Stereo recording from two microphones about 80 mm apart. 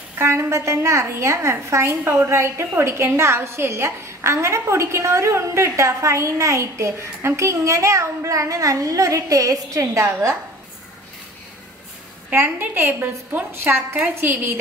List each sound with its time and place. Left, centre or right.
0.2 s a woman's voice: right
12.3 s a woman's voice: right
13.9 s a woman's voice: centre